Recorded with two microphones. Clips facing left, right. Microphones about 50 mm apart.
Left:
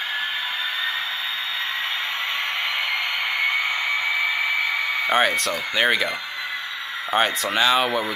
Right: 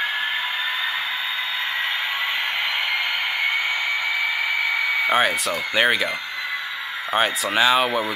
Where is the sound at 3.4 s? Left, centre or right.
Centre.